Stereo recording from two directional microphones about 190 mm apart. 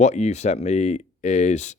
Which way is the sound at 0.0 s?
35° left (ahead or behind).